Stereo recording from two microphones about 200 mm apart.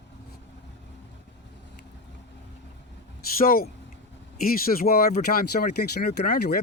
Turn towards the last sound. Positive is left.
turn(degrees=50)  # may be behind; listen again after turning